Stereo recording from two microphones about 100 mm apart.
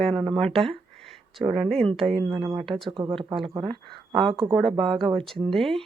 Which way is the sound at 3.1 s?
60° right (ahead or behind).